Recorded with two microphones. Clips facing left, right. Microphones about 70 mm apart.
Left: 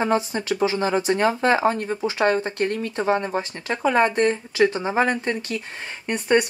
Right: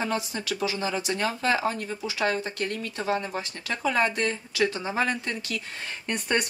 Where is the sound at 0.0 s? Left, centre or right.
Left.